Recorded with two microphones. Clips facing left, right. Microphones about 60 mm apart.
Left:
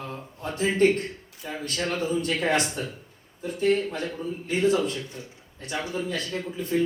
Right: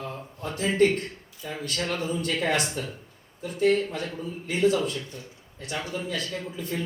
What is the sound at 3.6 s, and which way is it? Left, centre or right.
Speech, left.